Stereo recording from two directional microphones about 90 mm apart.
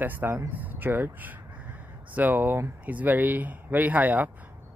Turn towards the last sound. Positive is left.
turn(degrees=-20)  # may be behind; listen again after turning